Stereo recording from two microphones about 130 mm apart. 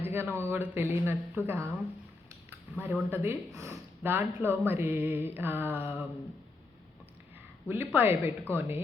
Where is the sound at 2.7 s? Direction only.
15° right (ahead or behind).